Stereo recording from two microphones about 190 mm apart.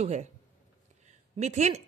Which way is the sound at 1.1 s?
35° right (ahead or behind).